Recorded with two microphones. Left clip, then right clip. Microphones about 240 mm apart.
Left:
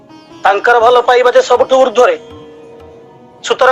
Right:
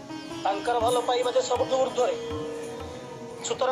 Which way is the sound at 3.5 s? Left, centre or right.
Left.